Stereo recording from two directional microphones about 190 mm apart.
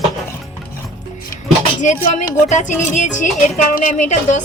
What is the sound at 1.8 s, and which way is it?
Music, 40° left (ahead or behind).